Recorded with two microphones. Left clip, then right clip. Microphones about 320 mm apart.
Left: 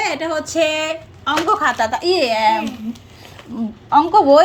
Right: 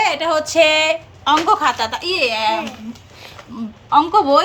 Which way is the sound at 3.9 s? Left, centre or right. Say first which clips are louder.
Left 2 dB; right.